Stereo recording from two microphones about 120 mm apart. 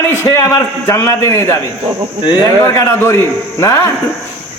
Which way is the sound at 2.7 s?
20° left (ahead or behind).